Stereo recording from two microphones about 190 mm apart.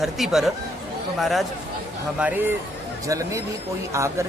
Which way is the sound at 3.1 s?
15° right (ahead or behind).